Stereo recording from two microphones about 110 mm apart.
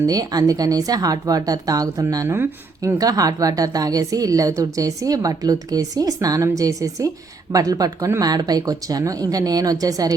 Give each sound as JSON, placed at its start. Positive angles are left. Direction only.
{"t": 0.0, "sound": "a woman's voice", "side_deg": -35}